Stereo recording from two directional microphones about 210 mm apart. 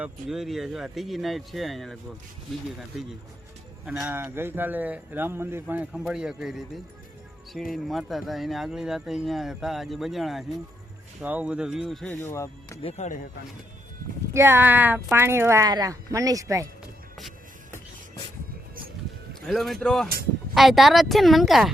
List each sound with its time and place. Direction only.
0.0 s speech: centre (ahead or behind)
3.8 s speech: 5° right (ahead or behind); by 12.8 s 15° left (ahead or behind)
12.8 s speech: 30° left (ahead or behind)
14.3 s speech: 10° right (ahead or behind)
19.5 s speech: centre (ahead or behind)